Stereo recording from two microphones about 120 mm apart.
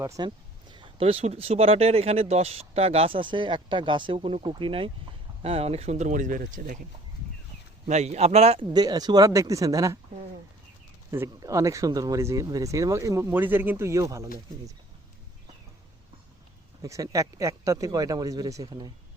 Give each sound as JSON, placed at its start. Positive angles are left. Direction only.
{"t": 0.2, "sound": "speech", "side_deg": -40}
{"t": 0.7, "sound": "speech", "side_deg": -50}
{"t": 7.9, "sound": "speech", "side_deg": -70}
{"t": 8.7, "sound": "speech", "side_deg": -35}
{"t": 11.3, "sound": "speech", "side_deg": -30}
{"t": 16.8, "sound": "speech", "side_deg": -25}